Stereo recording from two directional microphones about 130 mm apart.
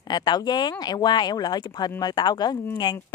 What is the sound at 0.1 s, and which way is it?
A woman's voice, 35° left (ahead or behind).